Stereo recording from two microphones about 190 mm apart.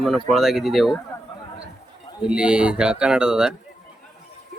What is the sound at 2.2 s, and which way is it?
Speech, 5° right (ahead or behind).